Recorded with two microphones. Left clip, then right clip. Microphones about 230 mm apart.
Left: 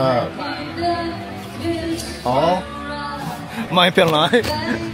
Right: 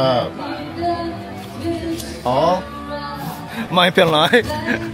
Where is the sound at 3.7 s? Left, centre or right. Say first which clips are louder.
Right 1 dB; centre.